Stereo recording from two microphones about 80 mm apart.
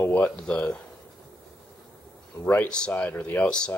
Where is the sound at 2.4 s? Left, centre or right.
Centre.